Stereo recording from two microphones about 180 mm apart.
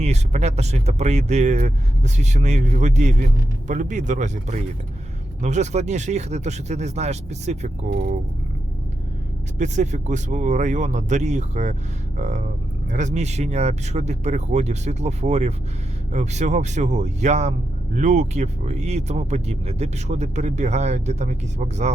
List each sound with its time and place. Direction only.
0.0 s speech: 40° right (ahead or behind)
9.6 s speech: 40° right (ahead or behind)